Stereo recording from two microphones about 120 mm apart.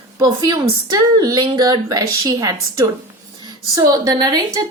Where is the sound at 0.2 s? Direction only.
30° right (ahead or behind).